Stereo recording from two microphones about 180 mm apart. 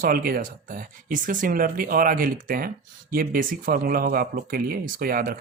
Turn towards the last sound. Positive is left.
turn(degrees=-55)  # may be behind; listen again after turning